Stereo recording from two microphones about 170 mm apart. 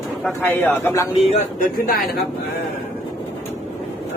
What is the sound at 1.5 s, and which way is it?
Speech, 60° left (ahead or behind).